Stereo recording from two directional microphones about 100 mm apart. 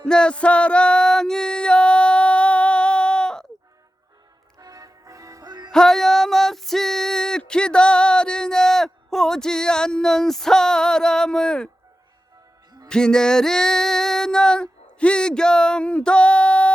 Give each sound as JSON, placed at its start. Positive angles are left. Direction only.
{"t": 0.0, "sound": "music", "side_deg": 10}
{"t": 4.5, "sound": "music", "side_deg": -35}
{"t": 5.7, "sound": "a sound", "side_deg": 5}
{"t": 12.9, "sound": "female singing", "side_deg": 10}